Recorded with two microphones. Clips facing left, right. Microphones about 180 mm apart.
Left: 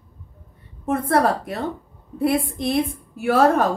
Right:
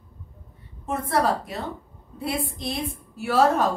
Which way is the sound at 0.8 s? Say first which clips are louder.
Left 4 dB; 55° left (ahead or behind).